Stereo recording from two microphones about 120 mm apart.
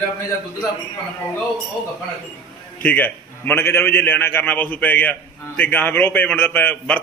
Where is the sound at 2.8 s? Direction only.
15° left (ahead or behind).